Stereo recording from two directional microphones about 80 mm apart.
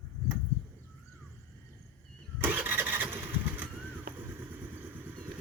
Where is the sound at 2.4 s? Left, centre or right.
Right.